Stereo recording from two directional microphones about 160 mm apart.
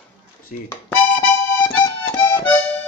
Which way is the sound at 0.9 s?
10° left (ahead or behind).